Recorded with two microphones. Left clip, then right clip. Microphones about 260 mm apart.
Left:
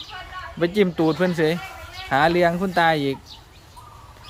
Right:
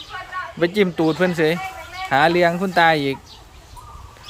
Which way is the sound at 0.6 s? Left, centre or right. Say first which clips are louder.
Right 1 dB; centre.